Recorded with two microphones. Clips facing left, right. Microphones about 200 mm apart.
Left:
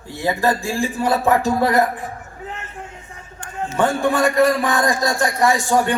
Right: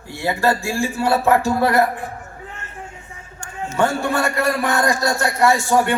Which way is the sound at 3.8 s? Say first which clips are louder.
Left 2 dB; 15° left (ahead or behind).